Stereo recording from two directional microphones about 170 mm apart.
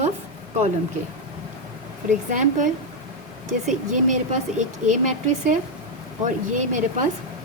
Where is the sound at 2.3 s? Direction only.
50° right (ahead or behind).